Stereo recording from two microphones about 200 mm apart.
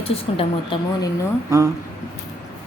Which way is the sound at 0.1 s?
30° left (ahead or behind).